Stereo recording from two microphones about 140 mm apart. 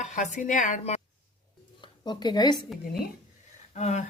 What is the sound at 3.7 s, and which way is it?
Speech, 55° left (ahead or behind).